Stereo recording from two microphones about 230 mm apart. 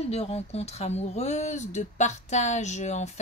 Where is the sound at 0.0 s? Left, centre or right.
Left.